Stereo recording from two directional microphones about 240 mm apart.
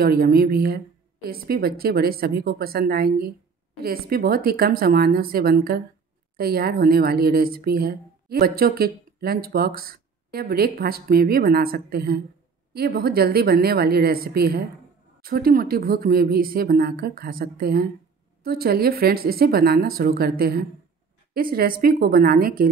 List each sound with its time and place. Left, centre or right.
0.0 s speech: right